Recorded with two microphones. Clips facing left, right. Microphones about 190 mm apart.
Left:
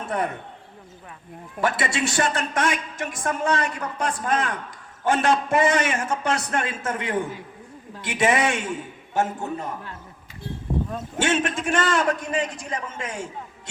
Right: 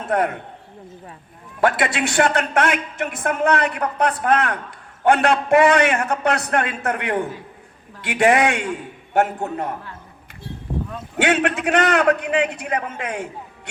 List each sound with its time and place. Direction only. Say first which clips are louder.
1.6 s a woman's voice: right 4 dB; 60° right (ahead or behind)
11.2 s a woman's voice: right 4 dB; 65° right (ahead or behind)